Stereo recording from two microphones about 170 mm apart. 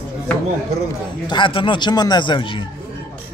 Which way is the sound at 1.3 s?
30° left (ahead or behind).